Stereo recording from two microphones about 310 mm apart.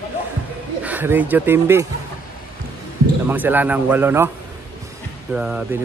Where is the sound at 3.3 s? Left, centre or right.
Centre.